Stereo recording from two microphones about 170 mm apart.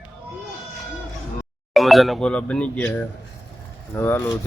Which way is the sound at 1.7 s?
Centre (ahead or behind).